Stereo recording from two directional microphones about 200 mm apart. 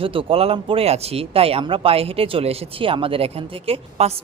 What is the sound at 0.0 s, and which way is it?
Speech, 25° right (ahead or behind).